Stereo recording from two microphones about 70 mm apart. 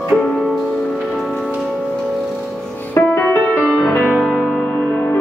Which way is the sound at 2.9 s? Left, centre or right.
Left.